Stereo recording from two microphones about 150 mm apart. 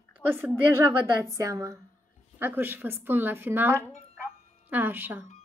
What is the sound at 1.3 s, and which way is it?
A woman's voice, 20° right (ahead or behind).